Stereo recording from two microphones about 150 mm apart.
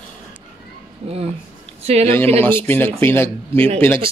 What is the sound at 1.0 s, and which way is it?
Speech, 40° right (ahead or behind).